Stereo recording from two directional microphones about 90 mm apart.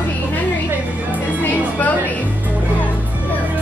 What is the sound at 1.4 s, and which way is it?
Music, 20° left (ahead or behind).